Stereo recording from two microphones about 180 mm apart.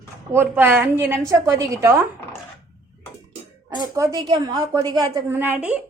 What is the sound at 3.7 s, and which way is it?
A woman's voice, 20° right (ahead or behind).